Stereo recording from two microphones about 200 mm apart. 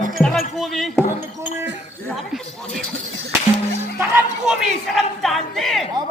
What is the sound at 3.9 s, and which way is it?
Speech, 5° right (ahead or behind).